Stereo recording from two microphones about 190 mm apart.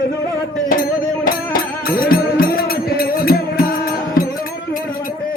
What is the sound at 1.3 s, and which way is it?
Music, 50° left (ahead or behind).